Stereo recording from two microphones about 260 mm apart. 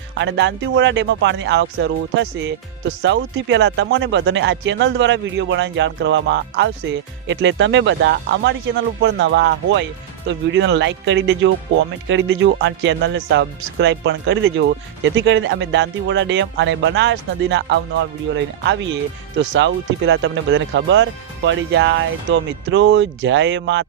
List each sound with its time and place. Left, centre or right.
0.1 s speech: right